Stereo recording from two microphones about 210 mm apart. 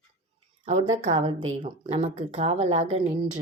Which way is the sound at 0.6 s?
30° right (ahead or behind).